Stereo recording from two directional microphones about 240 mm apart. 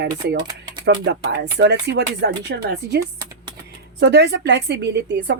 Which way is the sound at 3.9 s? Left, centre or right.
Right.